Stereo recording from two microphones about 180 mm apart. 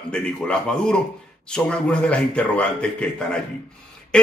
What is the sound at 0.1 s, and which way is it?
A man's voice, 5° left (ahead or behind).